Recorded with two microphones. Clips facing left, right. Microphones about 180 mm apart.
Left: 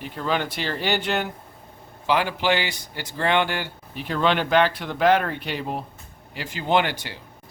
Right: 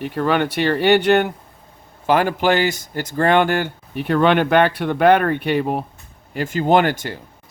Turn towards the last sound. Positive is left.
turn(degrees=-45)  # may be behind; listen again after turning